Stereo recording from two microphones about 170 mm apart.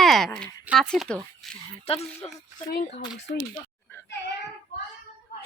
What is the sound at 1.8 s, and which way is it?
Speech, 35° left (ahead or behind).